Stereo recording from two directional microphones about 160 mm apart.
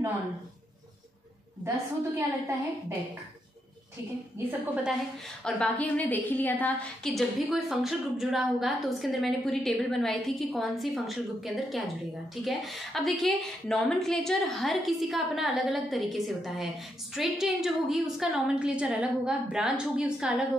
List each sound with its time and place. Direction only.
2.1 s a woman's voice: 20° right (ahead or behind)
4.5 s a woman's voice: 10° right (ahead or behind)
5.4 s a woman's voice: 10° left (ahead or behind)